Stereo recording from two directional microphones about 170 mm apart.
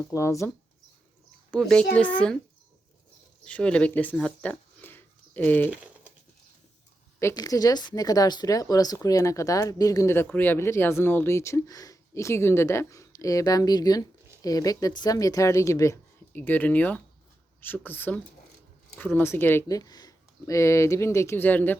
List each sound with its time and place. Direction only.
0.0 s speech: 20° left (ahead or behind)
1.5 s speech: 5° left (ahead or behind)
3.4 s speech: 5° left (ahead or behind)
4.2 s a sound: 10° left (ahead or behind)
5.7 s speech: 10° right (ahead or behind)
7.2 s speech: 20° left (ahead or behind)